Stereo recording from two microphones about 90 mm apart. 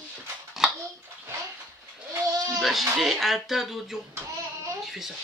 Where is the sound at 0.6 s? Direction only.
5° right (ahead or behind).